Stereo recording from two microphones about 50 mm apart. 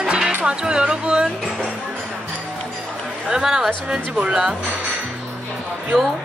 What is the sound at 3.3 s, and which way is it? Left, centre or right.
Speech, centre.